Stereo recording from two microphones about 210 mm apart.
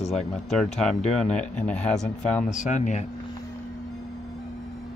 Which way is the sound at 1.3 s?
5° left (ahead or behind).